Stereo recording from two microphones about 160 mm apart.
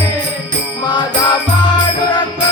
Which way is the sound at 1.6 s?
25° left (ahead or behind).